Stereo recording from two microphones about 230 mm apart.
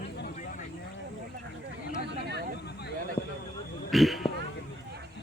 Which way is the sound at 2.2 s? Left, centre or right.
Right.